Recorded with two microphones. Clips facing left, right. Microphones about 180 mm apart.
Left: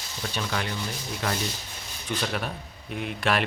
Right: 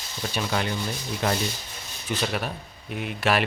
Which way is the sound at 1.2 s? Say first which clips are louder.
Right 4 dB; 20° right (ahead or behind).